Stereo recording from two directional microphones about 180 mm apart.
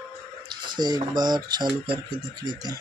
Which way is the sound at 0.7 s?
25° right (ahead or behind).